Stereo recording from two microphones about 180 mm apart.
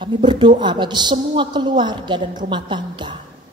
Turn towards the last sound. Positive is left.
turn(degrees=-25)  # may be behind; listen again after turning